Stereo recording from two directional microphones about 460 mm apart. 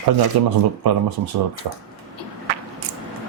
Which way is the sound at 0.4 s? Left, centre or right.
Right.